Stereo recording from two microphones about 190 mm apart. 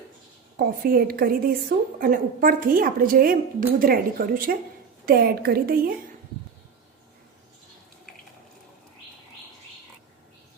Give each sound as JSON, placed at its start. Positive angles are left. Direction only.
{"t": 0.5, "sound": "a woman's voice", "side_deg": -50}